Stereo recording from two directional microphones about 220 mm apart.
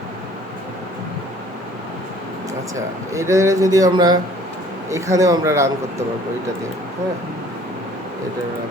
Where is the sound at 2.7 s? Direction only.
15° right (ahead or behind).